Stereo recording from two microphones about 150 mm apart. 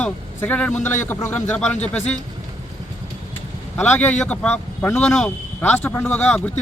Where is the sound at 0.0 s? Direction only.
10° left (ahead or behind).